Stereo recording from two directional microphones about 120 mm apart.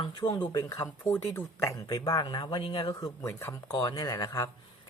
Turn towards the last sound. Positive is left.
turn(degrees=30)  # may be behind; listen again after turning